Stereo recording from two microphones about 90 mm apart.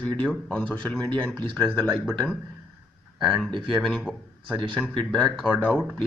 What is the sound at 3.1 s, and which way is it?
Speech, centre (ahead or behind).